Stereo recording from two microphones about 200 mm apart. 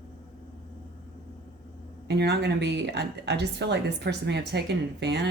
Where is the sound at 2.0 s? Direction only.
55° right (ahead or behind).